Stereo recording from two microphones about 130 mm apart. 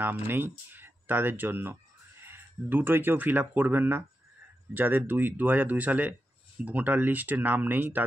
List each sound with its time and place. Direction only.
0.0 s speech: 15° right (ahead or behind)